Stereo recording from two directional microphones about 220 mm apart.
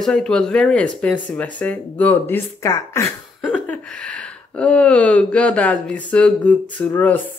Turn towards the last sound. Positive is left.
turn(degrees=5)  # may be behind; listen again after turning